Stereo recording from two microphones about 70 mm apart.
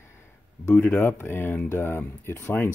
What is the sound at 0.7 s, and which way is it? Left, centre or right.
Speech, left.